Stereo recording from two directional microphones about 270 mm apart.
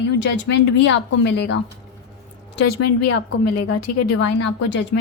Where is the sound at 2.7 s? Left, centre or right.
Left.